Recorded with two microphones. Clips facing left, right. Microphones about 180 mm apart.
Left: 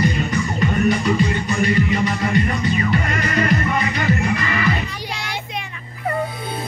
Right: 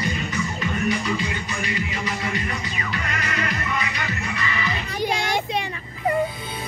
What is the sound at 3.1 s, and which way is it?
Music, 50° left (ahead or behind).